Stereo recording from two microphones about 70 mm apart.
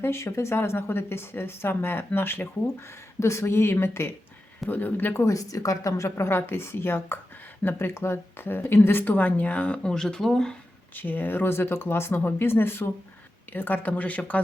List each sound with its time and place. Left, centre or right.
0.0 s speech: left
4.7 s a woman's voice: left
5.2 s a woman's voice: left; by 10.5 s centre
10.9 s a woman's voice: left